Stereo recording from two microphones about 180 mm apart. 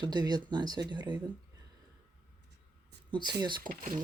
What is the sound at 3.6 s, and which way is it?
Speech, 50° right (ahead or behind).